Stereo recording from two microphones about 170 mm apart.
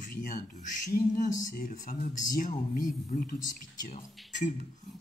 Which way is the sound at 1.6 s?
55° left (ahead or behind).